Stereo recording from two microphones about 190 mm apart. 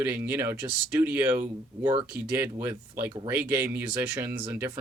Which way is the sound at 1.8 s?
25° right (ahead or behind).